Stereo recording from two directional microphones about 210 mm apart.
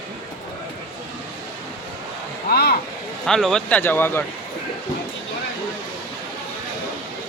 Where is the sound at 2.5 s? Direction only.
50° left (ahead or behind).